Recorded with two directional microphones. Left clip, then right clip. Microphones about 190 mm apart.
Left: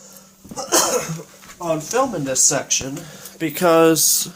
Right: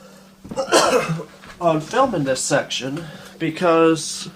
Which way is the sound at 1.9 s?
40° left (ahead or behind).